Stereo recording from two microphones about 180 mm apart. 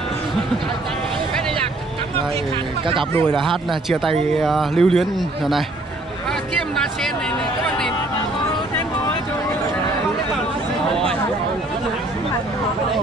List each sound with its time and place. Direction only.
2.9 s speech: 30° right (ahead or behind)
4.4 s speech: centre (ahead or behind)